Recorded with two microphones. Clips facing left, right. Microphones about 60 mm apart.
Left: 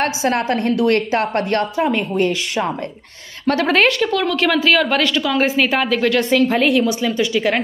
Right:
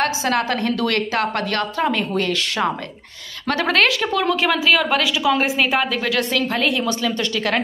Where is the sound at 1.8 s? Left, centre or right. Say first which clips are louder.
Left 2 dB; right.